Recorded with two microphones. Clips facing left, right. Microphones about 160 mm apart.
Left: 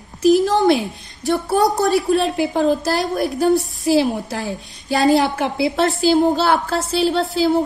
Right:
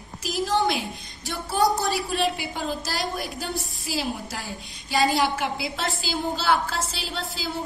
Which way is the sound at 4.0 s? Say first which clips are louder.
Left 10 dB; 65° left (ahead or behind).